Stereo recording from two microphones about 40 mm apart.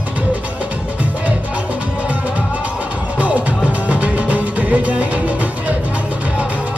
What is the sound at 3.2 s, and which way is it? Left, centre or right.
Music, right.